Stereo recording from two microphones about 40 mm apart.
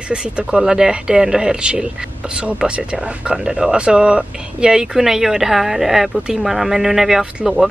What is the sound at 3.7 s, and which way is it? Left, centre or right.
Speech, right.